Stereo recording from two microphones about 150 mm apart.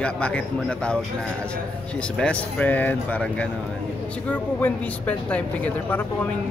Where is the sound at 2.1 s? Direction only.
10° left (ahead or behind).